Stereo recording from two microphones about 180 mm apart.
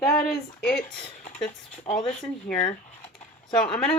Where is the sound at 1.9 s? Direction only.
30° left (ahead or behind).